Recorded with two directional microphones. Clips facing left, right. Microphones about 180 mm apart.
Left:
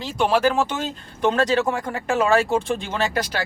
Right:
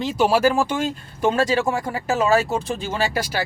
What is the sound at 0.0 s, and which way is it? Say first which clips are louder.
Speech: right 2 dB; 5° right (ahead or behind).